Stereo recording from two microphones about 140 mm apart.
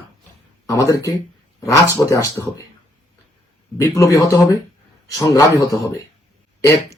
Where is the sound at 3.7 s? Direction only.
20° left (ahead or behind).